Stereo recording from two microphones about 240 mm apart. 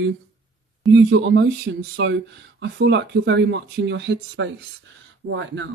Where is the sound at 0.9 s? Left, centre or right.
Right.